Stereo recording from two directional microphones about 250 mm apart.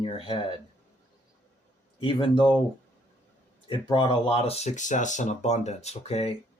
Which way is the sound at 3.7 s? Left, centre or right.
Centre.